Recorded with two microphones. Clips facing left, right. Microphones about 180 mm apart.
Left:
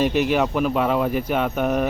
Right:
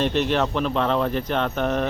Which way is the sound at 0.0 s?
10° left (ahead or behind).